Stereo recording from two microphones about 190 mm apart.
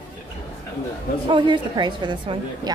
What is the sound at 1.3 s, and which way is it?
A woman's voice, 25° right (ahead or behind).